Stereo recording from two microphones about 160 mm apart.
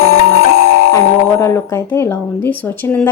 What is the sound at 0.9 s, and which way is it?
A woman's voice, 15° left (ahead or behind).